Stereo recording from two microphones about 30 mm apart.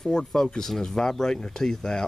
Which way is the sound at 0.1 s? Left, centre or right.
Left.